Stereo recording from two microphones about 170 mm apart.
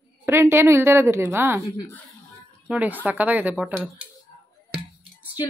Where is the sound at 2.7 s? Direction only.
10° right (ahead or behind).